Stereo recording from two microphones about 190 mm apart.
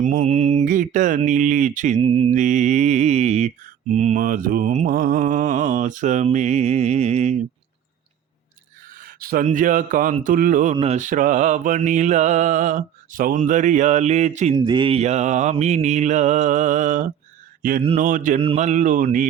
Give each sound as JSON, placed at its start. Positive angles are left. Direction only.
{"t": 0.0, "sound": "mantra", "side_deg": -40}
{"t": 2.0, "sound": "mantra", "side_deg": -30}
{"t": 2.3, "sound": "mantra", "side_deg": -40}
{"t": 9.0, "sound": "speech", "side_deg": -50}
{"t": 10.8, "sound": "mantra", "side_deg": -35}
{"t": 14.5, "sound": "mantra", "side_deg": -20}
{"t": 17.8, "sound": "speech", "side_deg": -40}
{"t": 18.3, "sound": "mantra", "side_deg": -35}